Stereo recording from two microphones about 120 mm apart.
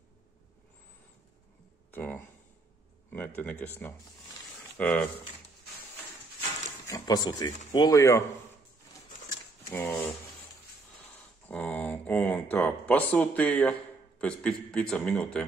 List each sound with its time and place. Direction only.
1.9 s speech: 15° left (ahead or behind)
3.3 s speech: 15° left (ahead or behind)
6.9 s speech: 35° left (ahead or behind)
9.7 s speech: 15° left (ahead or behind)
11.4 s speech: 15° left (ahead or behind)